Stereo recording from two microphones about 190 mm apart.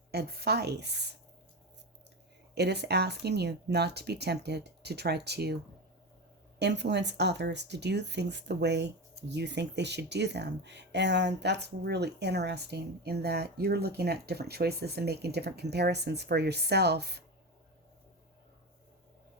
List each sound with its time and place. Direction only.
0.1 s speech: 60° right (ahead or behind)
2.6 s speech: 60° right (ahead or behind)
6.6 s speech: 65° right (ahead or behind)